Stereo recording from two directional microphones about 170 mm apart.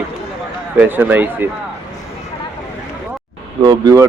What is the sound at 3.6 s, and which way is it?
Speech, 20° right (ahead or behind).